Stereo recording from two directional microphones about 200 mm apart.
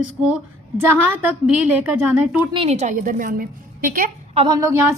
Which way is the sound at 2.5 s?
30° right (ahead or behind).